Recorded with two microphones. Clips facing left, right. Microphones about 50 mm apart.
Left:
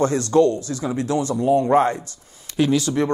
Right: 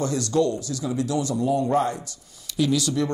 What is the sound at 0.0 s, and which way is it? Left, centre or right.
A man's voice, left.